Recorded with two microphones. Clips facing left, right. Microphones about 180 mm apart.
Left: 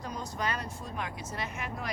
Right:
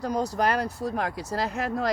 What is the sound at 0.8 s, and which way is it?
Speech, 80° right.